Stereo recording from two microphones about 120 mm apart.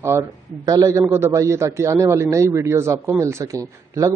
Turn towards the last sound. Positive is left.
turn(degrees=-30)  # may be behind; listen again after turning